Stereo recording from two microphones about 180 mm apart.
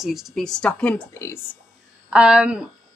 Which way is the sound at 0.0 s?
Centre (ahead or behind).